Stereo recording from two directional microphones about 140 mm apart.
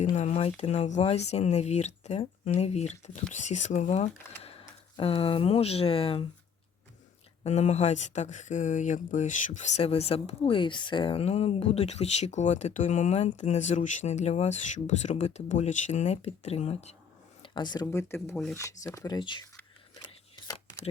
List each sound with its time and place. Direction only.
0.0 s speech: 55° left (ahead or behind)
4.9 s speech: 40° left (ahead or behind)
7.4 s speech: 50° left (ahead or behind)
17.4 s a sound: 35° left (ahead or behind)
17.9 s speech: 20° left (ahead or behind)